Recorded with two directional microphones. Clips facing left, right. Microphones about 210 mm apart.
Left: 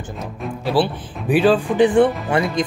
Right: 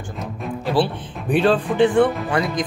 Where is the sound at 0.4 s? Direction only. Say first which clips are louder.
Left 1 dB; 5° left (ahead or behind).